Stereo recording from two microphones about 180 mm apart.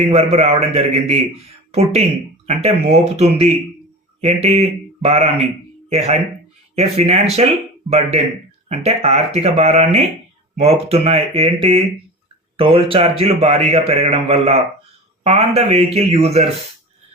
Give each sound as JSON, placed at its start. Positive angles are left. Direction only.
{"t": 0.1, "sound": "a man's voice", "side_deg": -35}